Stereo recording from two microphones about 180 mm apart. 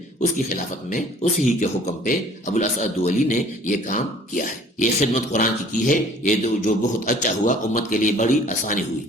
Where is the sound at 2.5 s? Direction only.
40° left (ahead or behind).